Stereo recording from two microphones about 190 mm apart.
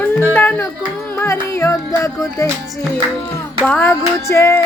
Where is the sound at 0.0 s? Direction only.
10° left (ahead or behind).